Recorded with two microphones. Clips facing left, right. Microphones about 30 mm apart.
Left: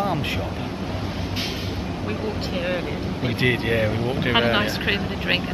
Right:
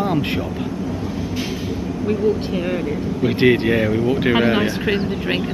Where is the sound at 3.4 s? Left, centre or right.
Centre.